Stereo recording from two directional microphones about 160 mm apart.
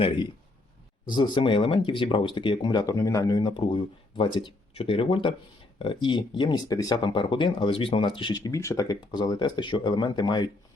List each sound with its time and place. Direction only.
1.0 s speech: 25° left (ahead or behind)